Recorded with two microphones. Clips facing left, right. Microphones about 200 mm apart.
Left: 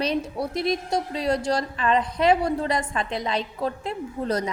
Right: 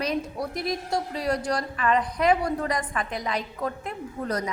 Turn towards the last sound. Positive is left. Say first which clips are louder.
# left 3 dB
turn(degrees=30)  # may be behind; listen again after turning